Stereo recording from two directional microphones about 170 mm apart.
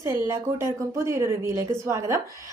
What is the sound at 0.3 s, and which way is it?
A woman's voice, 15° right (ahead or behind).